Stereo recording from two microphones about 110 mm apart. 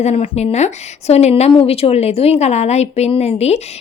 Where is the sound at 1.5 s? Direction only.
55° left (ahead or behind).